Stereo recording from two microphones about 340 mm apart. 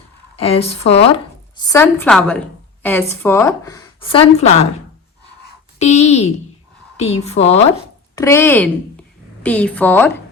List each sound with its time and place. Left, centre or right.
0.3 s speech: centre
5.8 s a woman's voice: centre